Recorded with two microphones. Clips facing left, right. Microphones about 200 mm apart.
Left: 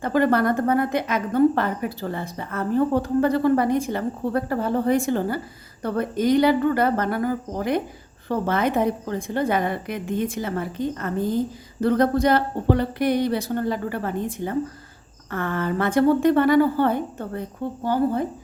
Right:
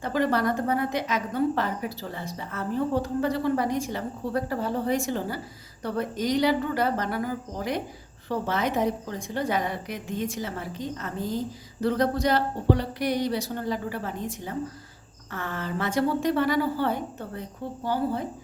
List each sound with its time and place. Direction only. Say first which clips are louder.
0.0 s a woman's voice: left 5 dB; 55° left (ahead or behind)